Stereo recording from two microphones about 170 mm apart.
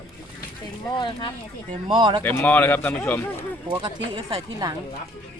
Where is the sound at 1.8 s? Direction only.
30° right (ahead or behind).